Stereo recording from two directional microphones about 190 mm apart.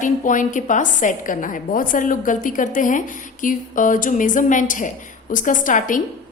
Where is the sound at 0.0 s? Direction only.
40° left (ahead or behind).